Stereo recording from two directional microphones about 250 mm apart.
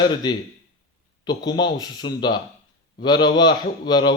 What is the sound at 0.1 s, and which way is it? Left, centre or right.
A man's voice, centre.